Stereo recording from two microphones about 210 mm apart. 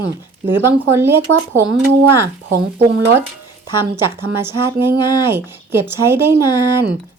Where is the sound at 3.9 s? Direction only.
10° right (ahead or behind).